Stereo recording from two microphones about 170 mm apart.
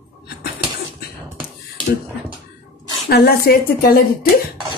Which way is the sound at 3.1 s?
65° left (ahead or behind).